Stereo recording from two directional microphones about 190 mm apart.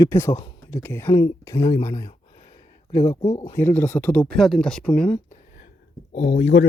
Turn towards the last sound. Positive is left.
turn(degrees=55)  # may be behind; listen again after turning